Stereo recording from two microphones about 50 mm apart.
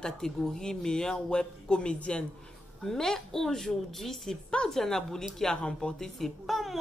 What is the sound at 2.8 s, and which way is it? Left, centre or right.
Speech, centre.